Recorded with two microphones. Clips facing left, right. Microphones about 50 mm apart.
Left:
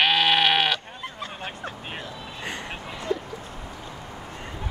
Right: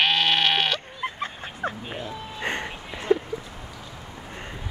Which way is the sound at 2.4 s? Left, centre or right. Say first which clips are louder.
Right 4 dB; right.